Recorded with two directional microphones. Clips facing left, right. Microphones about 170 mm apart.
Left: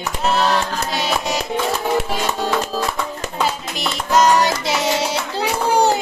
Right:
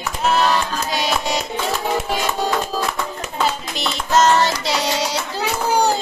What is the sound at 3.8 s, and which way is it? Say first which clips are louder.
Music: left 1 dB; 10° left (ahead or behind).